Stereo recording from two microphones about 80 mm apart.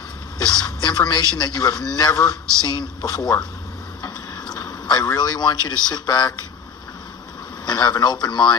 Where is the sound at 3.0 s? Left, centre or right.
Left.